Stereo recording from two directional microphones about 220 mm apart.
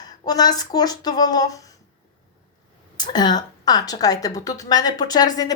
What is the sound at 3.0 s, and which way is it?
Speech, 20° left (ahead or behind).